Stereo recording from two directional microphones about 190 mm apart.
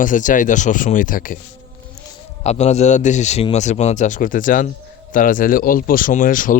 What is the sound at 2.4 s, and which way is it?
A man's voice, 35° left (ahead or behind).